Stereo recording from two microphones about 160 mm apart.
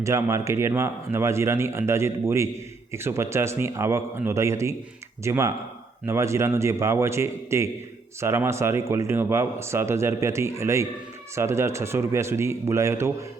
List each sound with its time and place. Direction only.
0.0 s speech: 15° right (ahead or behind)